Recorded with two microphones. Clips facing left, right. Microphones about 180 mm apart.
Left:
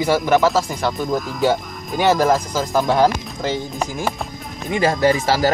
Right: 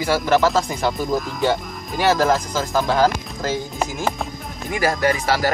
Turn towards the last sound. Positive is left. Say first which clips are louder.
# left 3 dB
turn(degrees=25)  # may be behind; listen again after turning